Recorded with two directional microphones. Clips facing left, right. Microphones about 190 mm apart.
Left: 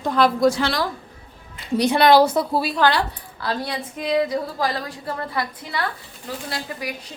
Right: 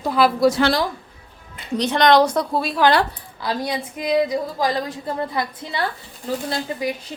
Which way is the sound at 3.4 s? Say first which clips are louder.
Right 2 dB; 15° right (ahead or behind).